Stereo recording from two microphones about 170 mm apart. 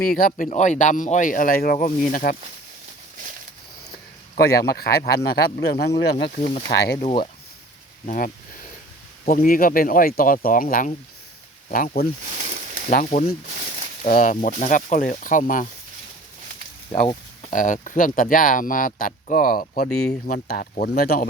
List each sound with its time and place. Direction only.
0.0 s speech: 55° left (ahead or behind)
4.4 s speech: 70° left (ahead or behind)
8.0 s speech: 50° left (ahead or behind)
12.3 s a sound: 40° right (ahead or behind)
12.9 s speech: 50° left (ahead or behind)
13.5 s a sound: 45° right (ahead or behind)
14.1 s speech: 50° left (ahead or behind)
17.5 s speech: 50° left (ahead or behind)